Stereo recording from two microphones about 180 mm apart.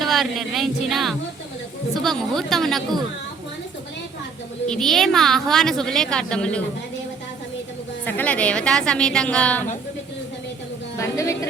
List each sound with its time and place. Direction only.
0.0 s a woman's voice: centre (ahead or behind)
4.7 s a woman's voice: centre (ahead or behind)
8.0 s a woman's voice: 10° left (ahead or behind)
10.9 s a woman's voice: 15° left (ahead or behind)